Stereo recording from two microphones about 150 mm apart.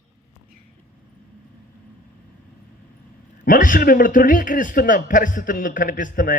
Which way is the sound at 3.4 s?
65° left (ahead or behind).